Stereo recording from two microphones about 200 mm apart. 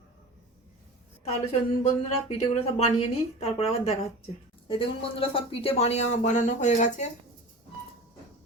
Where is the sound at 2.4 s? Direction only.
30° left (ahead or behind).